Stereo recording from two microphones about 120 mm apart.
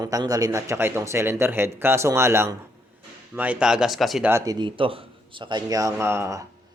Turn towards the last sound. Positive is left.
turn(degrees=-25)  # may be behind; listen again after turning